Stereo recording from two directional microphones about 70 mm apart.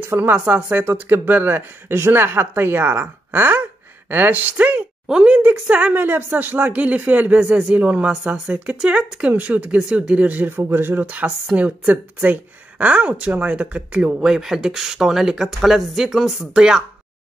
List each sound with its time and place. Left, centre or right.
0.1 s speech: right
10.5 s speech: right
14.2 s speech: centre